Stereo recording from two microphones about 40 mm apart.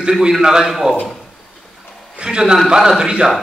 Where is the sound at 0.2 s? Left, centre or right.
Centre.